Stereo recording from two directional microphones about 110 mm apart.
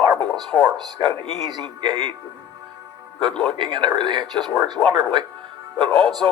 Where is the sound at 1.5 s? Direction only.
45° right (ahead or behind).